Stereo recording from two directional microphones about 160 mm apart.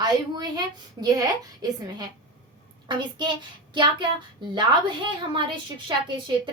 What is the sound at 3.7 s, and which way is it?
Speech, 30° right (ahead or behind).